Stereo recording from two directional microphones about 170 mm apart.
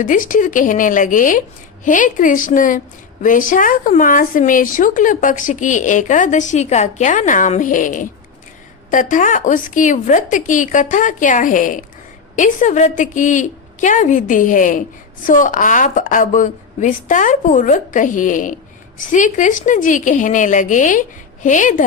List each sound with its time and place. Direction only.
0.0 s a woman's voice: 50° left (ahead or behind)